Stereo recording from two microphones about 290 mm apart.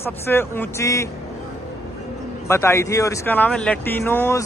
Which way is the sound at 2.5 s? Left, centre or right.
Centre.